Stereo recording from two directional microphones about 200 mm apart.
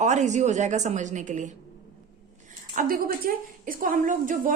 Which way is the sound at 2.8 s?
45° right (ahead or behind).